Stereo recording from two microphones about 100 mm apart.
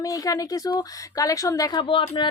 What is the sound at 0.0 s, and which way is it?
Speech, 35° left (ahead or behind).